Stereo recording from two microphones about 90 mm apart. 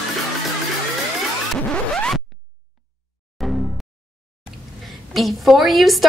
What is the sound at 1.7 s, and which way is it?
Scratch, 10° left (ahead or behind).